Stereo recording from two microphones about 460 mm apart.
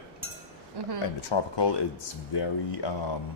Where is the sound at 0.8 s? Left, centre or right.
Right.